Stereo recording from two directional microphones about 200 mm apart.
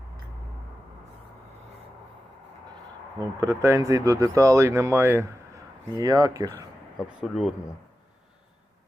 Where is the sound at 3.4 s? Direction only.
15° right (ahead or behind).